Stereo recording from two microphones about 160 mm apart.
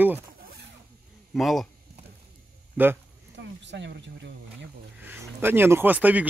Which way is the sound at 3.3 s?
90° right.